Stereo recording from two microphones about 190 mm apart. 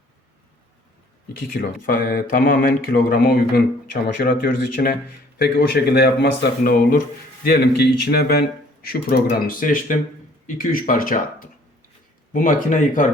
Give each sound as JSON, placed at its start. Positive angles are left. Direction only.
{"t": 1.5, "sound": "speech", "side_deg": 50}